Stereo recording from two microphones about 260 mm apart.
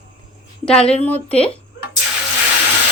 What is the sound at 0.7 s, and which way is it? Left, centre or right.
Speech, centre.